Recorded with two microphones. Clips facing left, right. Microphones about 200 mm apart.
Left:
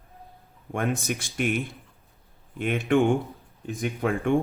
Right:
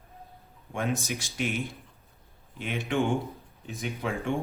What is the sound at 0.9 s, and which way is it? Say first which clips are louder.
Speech: left 3 dB; 55° left (ahead or behind).